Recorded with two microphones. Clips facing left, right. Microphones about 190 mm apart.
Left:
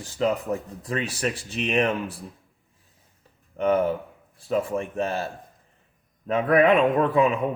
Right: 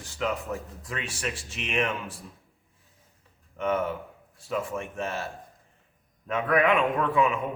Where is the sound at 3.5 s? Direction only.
35° left (ahead or behind).